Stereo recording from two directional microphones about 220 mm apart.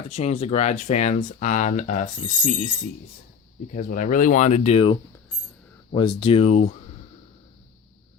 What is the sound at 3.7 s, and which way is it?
Speech, 35° left (ahead or behind).